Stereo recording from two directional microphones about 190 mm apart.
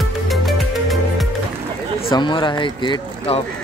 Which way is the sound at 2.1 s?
25° left (ahead or behind).